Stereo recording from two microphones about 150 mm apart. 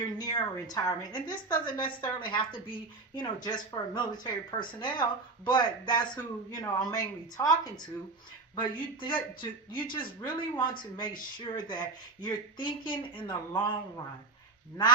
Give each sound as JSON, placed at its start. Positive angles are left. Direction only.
{"t": 0.0, "sound": "a woman's voice", "side_deg": 25}
{"t": 8.5, "sound": "speech", "side_deg": 35}